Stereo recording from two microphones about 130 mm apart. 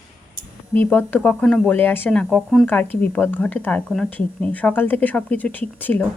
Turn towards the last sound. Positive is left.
turn(degrees=15)  # may be behind; listen again after turning